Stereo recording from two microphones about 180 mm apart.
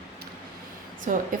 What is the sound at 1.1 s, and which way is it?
Speech, 50° right (ahead or behind).